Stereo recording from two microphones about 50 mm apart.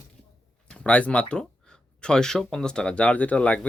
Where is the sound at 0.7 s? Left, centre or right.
Left.